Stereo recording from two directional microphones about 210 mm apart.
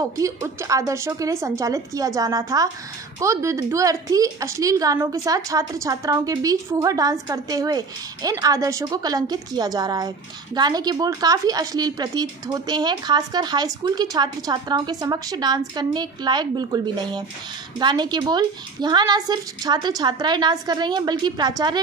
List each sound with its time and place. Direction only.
0.0 s a woman's voice: 15° right (ahead or behind)